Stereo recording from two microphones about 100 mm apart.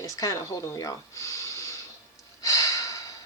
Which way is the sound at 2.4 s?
35° left (ahead or behind).